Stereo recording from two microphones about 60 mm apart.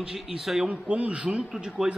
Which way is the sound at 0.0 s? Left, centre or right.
Centre.